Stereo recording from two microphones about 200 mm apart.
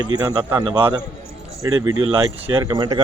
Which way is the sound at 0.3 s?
20° right (ahead or behind).